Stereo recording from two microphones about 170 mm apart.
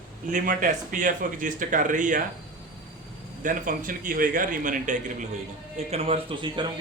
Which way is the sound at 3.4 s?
55° right (ahead or behind).